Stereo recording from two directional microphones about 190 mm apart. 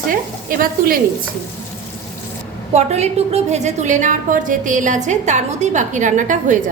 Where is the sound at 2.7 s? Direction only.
35° right (ahead or behind).